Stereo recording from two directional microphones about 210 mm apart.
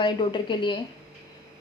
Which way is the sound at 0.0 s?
20° left (ahead or behind).